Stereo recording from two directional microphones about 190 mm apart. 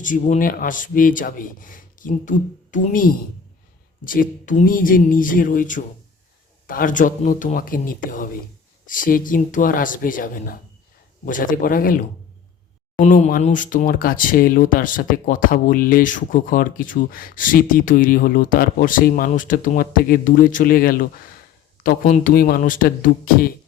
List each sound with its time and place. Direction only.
0.0 s speech: 45° left (ahead or behind)